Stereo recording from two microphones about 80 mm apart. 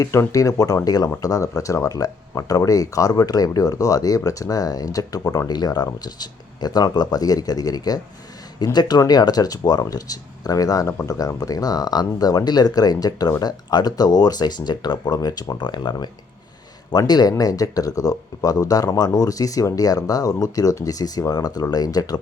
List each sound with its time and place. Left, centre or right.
0.1 s speech: left
8.5 s speech: left